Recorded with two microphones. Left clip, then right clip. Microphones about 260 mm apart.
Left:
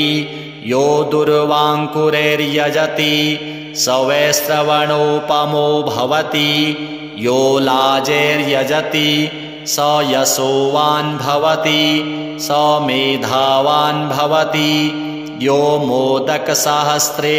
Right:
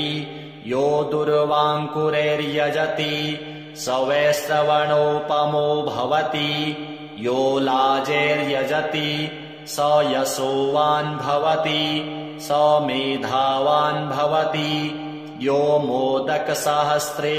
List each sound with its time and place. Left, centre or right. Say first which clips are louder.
0.7 s mantra: left 7 dB; left